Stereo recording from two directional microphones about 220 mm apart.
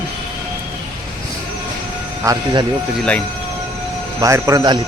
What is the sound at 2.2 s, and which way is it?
Speech, 15° right (ahead or behind).